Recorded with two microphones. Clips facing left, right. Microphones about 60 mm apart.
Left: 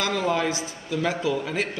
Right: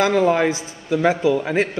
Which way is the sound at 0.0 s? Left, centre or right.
Right.